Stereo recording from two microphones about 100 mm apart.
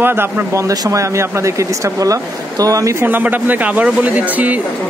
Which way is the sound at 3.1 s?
20° right (ahead or behind).